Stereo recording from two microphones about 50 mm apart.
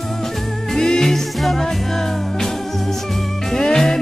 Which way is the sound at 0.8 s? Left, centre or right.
Centre.